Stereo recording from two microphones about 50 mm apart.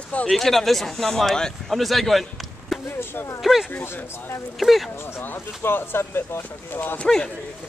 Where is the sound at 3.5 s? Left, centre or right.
Centre.